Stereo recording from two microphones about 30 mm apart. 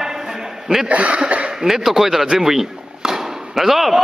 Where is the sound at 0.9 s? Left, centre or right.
Right.